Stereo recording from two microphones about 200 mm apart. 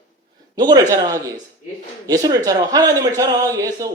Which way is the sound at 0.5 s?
20° right (ahead or behind).